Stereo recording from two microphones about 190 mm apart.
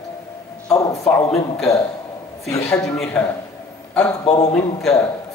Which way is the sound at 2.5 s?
15° left (ahead or behind).